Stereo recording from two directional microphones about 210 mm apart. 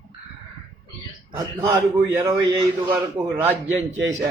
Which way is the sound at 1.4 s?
15° right (ahead or behind).